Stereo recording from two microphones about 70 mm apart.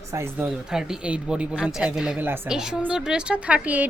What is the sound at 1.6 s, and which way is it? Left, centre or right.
A woman's voice, centre.